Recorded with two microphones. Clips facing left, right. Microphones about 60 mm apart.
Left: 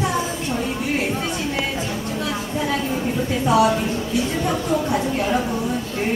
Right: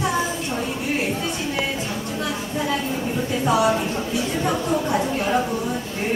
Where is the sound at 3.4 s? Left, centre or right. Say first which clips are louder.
Left 2 dB; right.